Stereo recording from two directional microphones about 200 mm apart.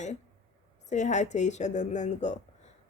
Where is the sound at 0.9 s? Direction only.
35° left (ahead or behind).